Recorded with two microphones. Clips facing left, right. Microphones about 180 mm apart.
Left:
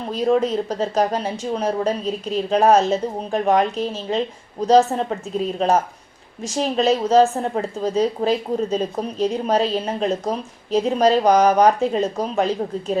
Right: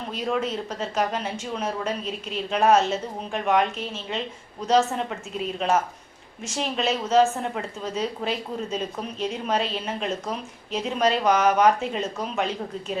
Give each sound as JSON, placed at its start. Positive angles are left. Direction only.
{"t": 0.1, "sound": "a woman's voice", "side_deg": 35}